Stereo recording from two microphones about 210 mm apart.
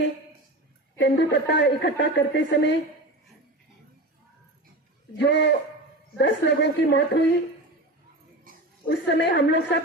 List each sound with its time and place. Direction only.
0.9 s a woman's voice: 55° left (ahead or behind)
5.1 s a woman's voice: 55° left (ahead or behind)
8.9 s a woman's voice: 55° left (ahead or behind)